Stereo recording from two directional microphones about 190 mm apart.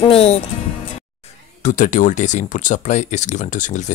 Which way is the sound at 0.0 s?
35° left (ahead or behind).